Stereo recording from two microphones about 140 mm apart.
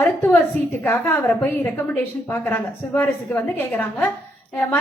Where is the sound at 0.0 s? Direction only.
15° left (ahead or behind).